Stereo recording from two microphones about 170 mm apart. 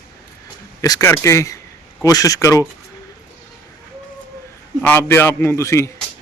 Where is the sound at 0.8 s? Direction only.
20° left (ahead or behind).